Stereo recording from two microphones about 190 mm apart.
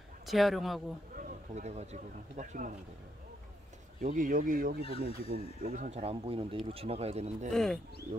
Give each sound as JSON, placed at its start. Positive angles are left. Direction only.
{"t": 0.3, "sound": "speech", "side_deg": 0}
{"t": 1.1, "sound": "speech", "side_deg": -35}
{"t": 4.0, "sound": "speech", "side_deg": -45}
{"t": 4.8, "sound": "speech", "side_deg": 30}
{"t": 5.3, "sound": "speech", "side_deg": -50}
{"t": 5.9, "sound": "speech", "side_deg": -35}
{"t": 7.5, "sound": "speech", "side_deg": 5}